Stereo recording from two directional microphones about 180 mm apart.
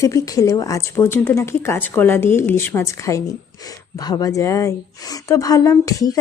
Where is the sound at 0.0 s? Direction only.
15° left (ahead or behind).